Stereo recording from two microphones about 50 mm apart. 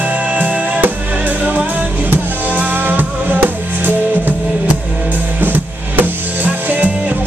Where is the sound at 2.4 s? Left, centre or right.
Right.